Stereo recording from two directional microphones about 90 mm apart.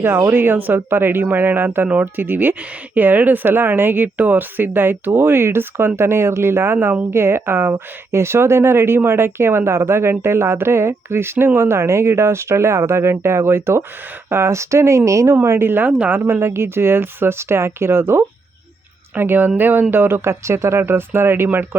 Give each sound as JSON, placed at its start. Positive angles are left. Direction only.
{"t": 0.0, "sound": "speech", "side_deg": -25}